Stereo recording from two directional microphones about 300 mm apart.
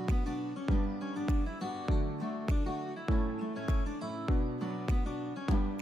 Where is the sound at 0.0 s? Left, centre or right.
Centre.